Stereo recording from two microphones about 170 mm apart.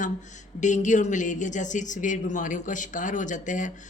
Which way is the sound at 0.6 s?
45° left (ahead or behind).